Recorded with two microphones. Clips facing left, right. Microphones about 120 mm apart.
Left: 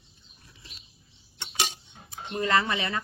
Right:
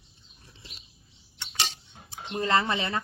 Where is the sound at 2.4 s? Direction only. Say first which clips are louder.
Even; 30° right (ahead or behind).